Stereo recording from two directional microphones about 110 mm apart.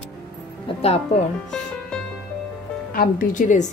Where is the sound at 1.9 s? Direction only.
10° left (ahead or behind).